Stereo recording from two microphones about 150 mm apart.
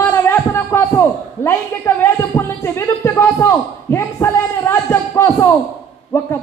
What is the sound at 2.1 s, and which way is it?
A man's voice, 15° left (ahead or behind).